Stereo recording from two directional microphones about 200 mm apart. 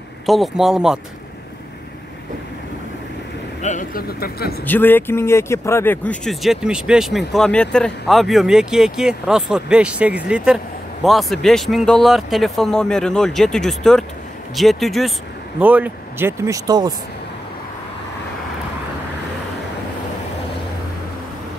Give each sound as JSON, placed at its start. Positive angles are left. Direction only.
{"t": 0.3, "sound": "speech", "side_deg": 0}
{"t": 3.6, "sound": "speech", "side_deg": 40}
{"t": 4.6, "sound": "speech", "side_deg": 10}